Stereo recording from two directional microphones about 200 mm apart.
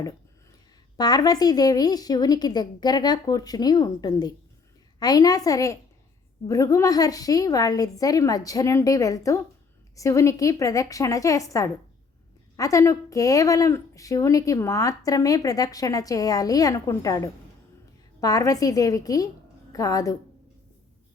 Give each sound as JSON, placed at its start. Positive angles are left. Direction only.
{"t": 0.9, "sound": "a woman's voice", "side_deg": 20}